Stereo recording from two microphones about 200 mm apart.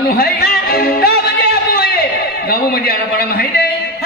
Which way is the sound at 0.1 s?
50° left (ahead or behind).